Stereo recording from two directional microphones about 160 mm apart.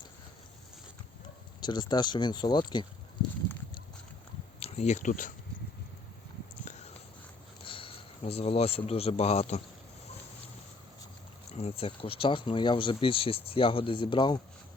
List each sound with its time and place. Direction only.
1.6 s speech: 25° left (ahead or behind)
4.6 s speech: 40° left (ahead or behind)
6.7 s a sound: 45° left (ahead or behind)
7.6 s a man's voice: 35° left (ahead or behind)
11.5 s speech: 40° left (ahead or behind)